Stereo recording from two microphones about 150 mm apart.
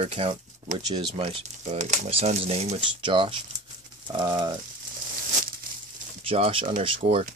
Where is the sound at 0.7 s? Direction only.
30° right (ahead or behind).